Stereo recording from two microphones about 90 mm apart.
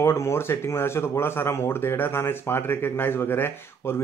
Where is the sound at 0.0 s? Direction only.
30° left (ahead or behind).